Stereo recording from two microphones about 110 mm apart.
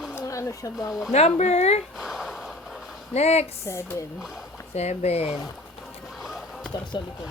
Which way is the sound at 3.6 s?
25° left (ahead or behind).